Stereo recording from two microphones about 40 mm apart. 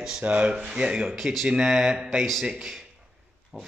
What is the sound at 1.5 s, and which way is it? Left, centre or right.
Speech, centre.